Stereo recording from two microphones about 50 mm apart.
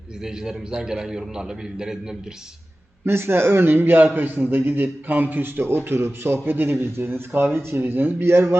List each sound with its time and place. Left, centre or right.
0.3 s a man's voice: centre
3.0 s a man's voice: right
8.3 s a man's voice: right